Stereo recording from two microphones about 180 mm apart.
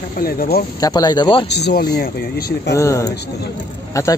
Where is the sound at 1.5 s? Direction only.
65° left (ahead or behind).